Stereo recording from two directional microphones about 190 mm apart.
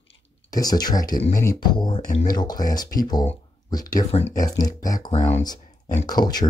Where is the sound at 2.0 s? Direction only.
40° left (ahead or behind).